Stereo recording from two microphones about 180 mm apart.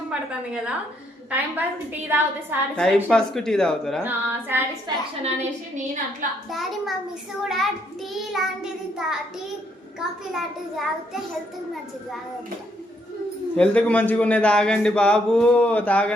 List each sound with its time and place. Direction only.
0.1 s a woman's voice: 5° right (ahead or behind)
2.7 s speech: 5° left (ahead or behind)
4.0 s a woman's voice: 10° right (ahead or behind)
4.9 s a woman's voice: 25° right (ahead or behind)
5.7 s a woman's voice: 45° right (ahead or behind)
6.5 s speech: centre (ahead or behind)
13.6 s a man's voice: 5° left (ahead or behind)